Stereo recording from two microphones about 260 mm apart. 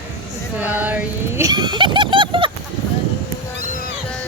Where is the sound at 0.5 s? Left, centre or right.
Centre.